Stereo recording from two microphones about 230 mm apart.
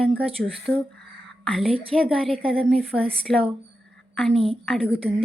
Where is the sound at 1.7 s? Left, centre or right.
Right.